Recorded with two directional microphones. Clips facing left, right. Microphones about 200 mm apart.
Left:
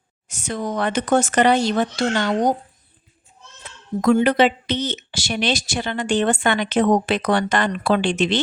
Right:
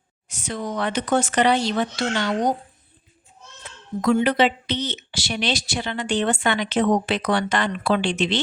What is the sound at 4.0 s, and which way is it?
Speech, 45° left (ahead or behind).